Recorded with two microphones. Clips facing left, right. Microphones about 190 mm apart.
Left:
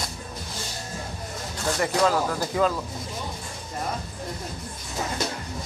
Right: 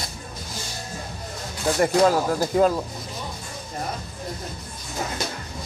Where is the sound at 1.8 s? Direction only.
40° right (ahead or behind).